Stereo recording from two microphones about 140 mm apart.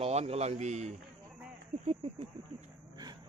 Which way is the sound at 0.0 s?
50° right (ahead or behind).